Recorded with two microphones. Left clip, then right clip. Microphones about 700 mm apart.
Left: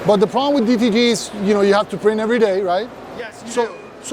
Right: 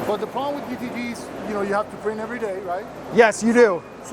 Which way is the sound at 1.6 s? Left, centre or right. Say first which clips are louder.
Left 8 dB; left.